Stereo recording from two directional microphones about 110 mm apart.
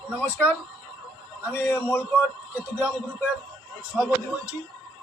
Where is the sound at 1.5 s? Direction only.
20° left (ahead or behind).